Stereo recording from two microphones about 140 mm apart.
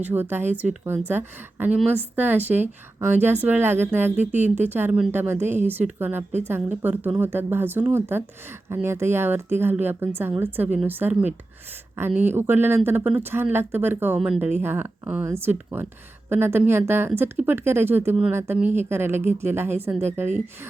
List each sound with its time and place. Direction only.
0.0 s a woman's voice: 15° right (ahead or behind)
14.2 s speech: 5° right (ahead or behind)
14.6 s a woman's voice: 15° right (ahead or behind)